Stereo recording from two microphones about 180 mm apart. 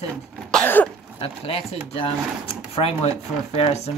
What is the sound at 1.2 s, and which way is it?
Speech, 30° left (ahead or behind).